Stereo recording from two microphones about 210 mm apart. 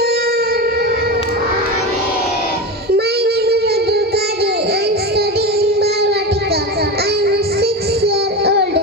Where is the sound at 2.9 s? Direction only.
50° right (ahead or behind).